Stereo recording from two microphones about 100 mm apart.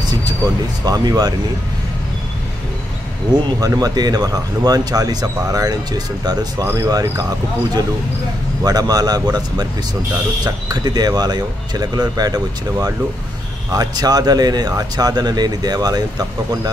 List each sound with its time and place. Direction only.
0.8 s speech: 40° right (ahead or behind)
3.3 s speech: 45° right (ahead or behind)
8.6 s speech: 40° right (ahead or behind)